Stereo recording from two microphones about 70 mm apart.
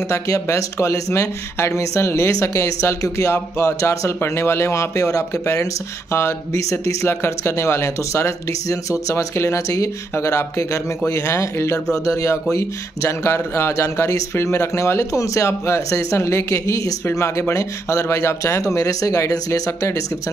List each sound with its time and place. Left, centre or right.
0.1 s speech: left